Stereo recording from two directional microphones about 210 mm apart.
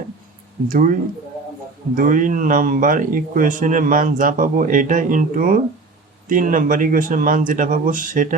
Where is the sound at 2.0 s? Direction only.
40° right (ahead or behind).